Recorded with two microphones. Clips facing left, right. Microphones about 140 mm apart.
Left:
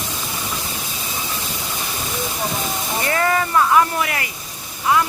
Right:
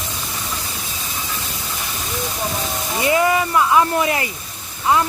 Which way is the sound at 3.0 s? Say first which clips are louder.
Right 3 dB; 15° right (ahead or behind).